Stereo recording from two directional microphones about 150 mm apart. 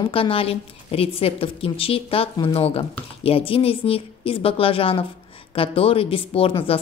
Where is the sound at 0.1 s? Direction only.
35° left (ahead or behind).